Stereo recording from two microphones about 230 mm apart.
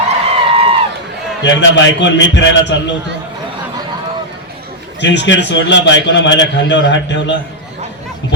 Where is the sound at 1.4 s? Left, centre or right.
Left.